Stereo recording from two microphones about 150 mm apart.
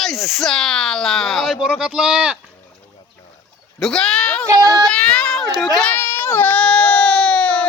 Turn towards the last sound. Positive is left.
turn(degrees=10)  # may be behind; listen again after turning